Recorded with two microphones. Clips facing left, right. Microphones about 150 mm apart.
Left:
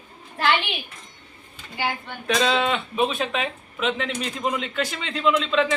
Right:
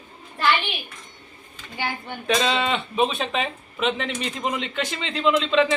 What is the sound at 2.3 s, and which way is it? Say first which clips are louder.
Speech: left 2 dB; centre (ahead or behind).